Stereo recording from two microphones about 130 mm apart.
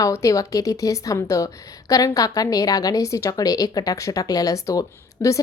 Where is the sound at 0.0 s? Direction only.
25° left (ahead or behind).